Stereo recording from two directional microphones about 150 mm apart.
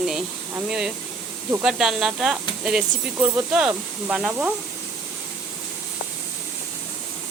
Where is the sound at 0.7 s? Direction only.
5° right (ahead or behind).